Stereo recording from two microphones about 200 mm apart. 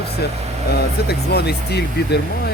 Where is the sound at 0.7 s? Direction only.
55° left (ahead or behind).